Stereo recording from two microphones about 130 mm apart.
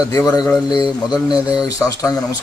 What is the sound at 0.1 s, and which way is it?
Speech, 30° left (ahead or behind).